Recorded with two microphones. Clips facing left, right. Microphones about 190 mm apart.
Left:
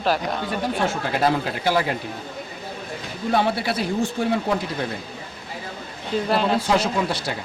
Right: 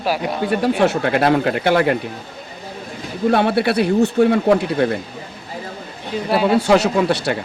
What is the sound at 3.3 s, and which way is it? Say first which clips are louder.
Speech: right 5 dB; 65° right (ahead or behind).